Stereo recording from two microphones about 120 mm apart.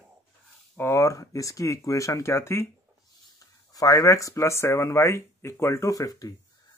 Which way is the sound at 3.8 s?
30° left (ahead or behind).